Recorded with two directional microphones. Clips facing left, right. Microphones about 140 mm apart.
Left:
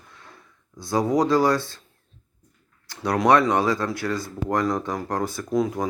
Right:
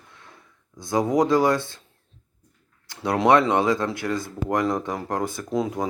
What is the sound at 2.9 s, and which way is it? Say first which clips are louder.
Speech: even; 20° right (ahead or behind).